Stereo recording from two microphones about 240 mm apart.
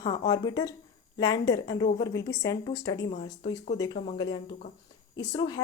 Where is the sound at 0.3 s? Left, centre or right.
Centre.